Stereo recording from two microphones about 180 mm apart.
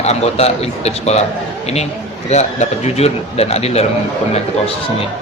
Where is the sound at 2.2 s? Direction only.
40° left (ahead or behind).